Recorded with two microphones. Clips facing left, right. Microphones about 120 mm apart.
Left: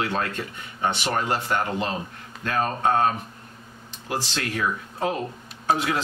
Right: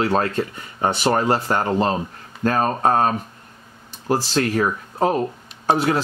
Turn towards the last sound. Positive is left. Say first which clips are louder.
# right 5 dB
turn(degrees=-35)  # may be behind; listen again after turning